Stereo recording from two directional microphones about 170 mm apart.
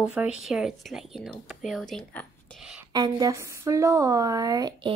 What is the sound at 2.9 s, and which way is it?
A woman's voice, 25° right (ahead or behind).